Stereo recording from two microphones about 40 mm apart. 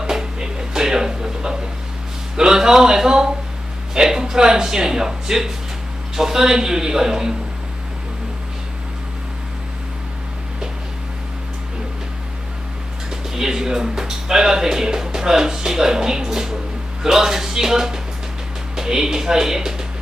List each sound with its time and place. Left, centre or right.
0.0 s a sound: centre
2.3 s a man's voice: centre
13.1 s a man's voice: centre